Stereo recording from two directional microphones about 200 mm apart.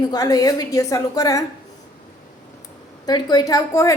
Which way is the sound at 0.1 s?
20° left (ahead or behind).